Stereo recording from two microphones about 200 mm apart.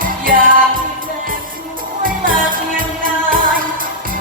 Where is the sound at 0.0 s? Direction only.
45° right (ahead or behind).